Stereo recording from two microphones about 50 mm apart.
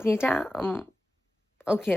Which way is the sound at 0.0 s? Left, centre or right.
Left.